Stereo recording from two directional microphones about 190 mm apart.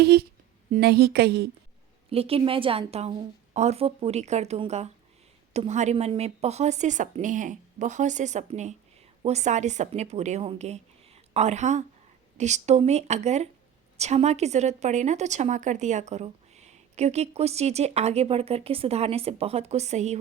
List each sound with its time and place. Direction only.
0.0 s speech: 60° right (ahead or behind)
2.0 s a woman's voice: 30° right (ahead or behind)